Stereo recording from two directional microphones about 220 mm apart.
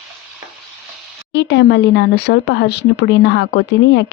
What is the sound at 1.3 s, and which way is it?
Speech, 55° left (ahead or behind).